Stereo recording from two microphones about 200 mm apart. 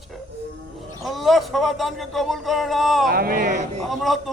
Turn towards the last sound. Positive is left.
turn(degrees=0)  # may be behind; listen again after turning